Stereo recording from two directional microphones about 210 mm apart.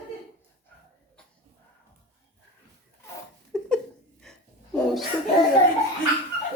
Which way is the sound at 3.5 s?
5° left (ahead or behind).